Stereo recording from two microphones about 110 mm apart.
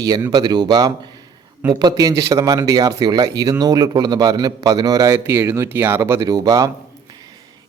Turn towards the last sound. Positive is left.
turn(degrees=-35)  # may be behind; listen again after turning